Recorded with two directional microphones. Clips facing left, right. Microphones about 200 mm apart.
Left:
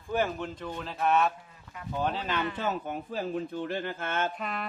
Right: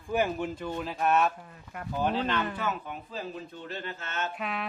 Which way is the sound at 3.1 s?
55° left (ahead or behind).